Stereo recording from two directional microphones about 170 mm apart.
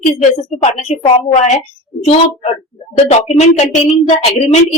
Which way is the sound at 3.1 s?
40° left (ahead or behind).